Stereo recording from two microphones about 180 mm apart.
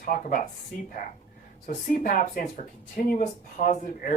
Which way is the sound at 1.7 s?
50° left (ahead or behind).